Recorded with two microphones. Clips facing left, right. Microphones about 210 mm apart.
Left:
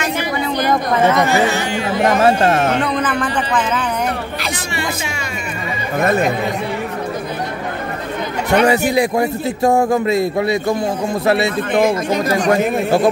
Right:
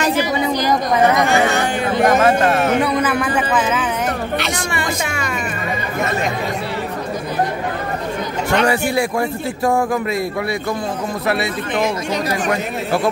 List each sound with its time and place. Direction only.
0.2 s chatter: 55° left (ahead or behind)
2.8 s a man's voice: 10° right (ahead or behind)
8.6 s a man's voice: 20° left (ahead or behind)
11.7 s speech: 50° left (ahead or behind)
12.4 s a man's voice: 25° left (ahead or behind)